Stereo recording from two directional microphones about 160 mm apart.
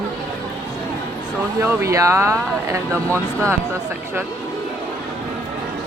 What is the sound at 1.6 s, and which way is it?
Speech, 15° right (ahead or behind).